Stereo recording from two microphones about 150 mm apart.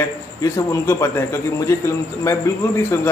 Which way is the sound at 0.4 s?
20° left (ahead or behind).